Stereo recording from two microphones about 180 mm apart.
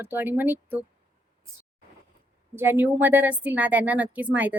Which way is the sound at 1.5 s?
15° right (ahead or behind).